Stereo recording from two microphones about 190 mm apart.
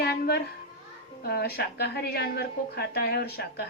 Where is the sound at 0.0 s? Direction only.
55° left (ahead or behind).